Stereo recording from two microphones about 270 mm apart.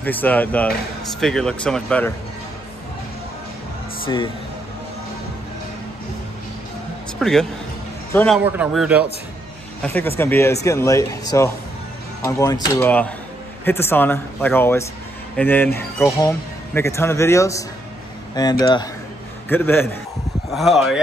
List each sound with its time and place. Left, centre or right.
0.0 s speech: centre
4.0 s speech: centre
7.2 s a man's voice: centre
8.5 s speech: centre
9.8 s speech: centre